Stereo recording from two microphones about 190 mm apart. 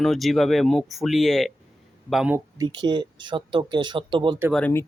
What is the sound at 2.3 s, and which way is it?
Speech, 20° right (ahead or behind).